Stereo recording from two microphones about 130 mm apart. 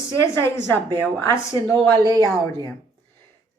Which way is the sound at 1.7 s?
30° right (ahead or behind).